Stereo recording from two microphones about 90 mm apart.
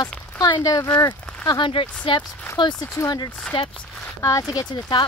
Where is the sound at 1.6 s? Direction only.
70° left (ahead or behind).